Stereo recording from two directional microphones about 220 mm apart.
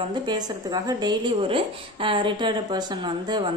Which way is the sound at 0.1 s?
20° right (ahead or behind).